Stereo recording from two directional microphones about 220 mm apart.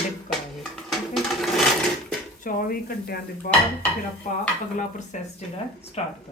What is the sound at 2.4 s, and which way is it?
Speech, 40° left (ahead or behind).